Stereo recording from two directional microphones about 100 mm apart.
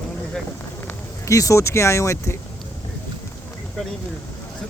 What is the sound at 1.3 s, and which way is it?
Speech, 30° left (ahead or behind).